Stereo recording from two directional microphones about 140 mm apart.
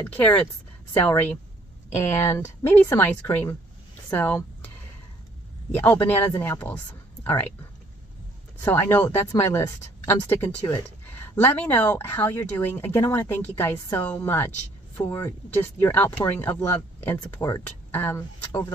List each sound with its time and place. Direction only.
0.0 s speech: 10° left (ahead or behind)
5.7 s speech: 15° left (ahead or behind)
8.6 s speech: 15° left (ahead or behind)
15.5 s speech: 15° left (ahead or behind)